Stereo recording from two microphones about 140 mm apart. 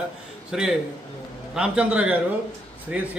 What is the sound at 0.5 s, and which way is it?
A man's voice, 5° right (ahead or behind).